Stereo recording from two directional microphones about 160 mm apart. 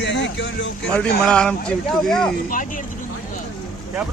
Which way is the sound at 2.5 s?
60° left (ahead or behind).